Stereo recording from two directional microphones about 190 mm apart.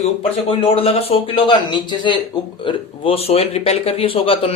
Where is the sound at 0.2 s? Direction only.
30° left (ahead or behind).